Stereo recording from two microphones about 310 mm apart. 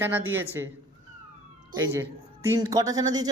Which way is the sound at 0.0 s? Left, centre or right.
Centre.